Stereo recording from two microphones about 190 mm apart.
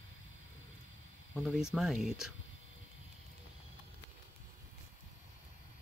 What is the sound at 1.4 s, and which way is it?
Speech, 5° right (ahead or behind).